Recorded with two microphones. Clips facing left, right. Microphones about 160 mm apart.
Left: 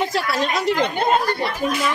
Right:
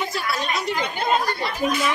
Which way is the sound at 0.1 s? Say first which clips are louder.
Left 4 dB; 90° left.